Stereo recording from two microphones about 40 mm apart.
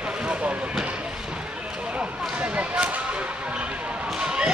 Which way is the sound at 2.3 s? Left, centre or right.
Right.